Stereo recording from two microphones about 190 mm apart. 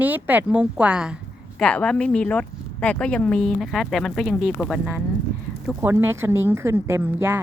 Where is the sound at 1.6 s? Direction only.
5° left (ahead or behind).